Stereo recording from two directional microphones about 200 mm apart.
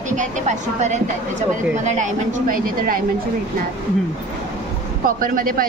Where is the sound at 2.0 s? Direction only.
40° right (ahead or behind).